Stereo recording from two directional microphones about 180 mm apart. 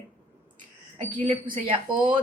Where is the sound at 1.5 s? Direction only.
25° right (ahead or behind).